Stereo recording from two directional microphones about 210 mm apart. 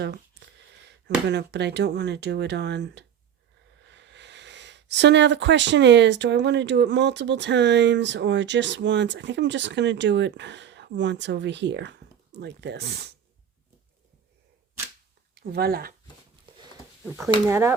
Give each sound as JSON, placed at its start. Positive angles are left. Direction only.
{"t": 0.0, "sound": "a sound", "side_deg": -55}
{"t": 0.9, "sound": "speech", "side_deg": -55}
{"t": 15.4, "sound": "speech", "side_deg": -50}
{"t": 17.1, "sound": "speech", "side_deg": -5}